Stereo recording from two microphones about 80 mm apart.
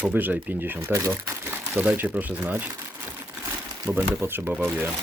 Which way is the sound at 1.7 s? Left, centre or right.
Centre.